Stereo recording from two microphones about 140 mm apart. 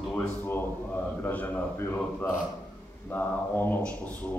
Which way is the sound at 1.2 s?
10° left (ahead or behind).